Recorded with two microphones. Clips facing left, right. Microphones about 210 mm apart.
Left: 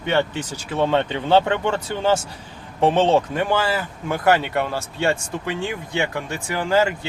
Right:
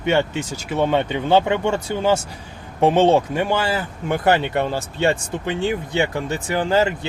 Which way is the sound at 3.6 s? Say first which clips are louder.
Right 1 dB; 25° right (ahead or behind).